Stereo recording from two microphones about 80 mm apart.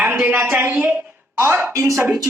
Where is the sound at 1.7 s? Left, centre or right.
Right.